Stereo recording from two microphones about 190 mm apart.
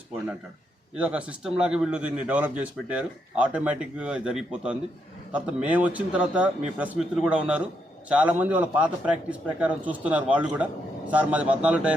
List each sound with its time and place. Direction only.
0.9 s a man's voice: 5° right (ahead or behind)